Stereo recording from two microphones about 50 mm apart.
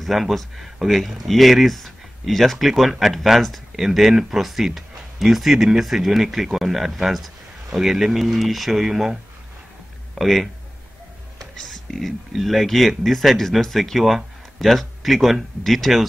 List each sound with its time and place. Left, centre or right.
0.0 s speech: centre
11.3 s music: centre
12.3 s speech: centre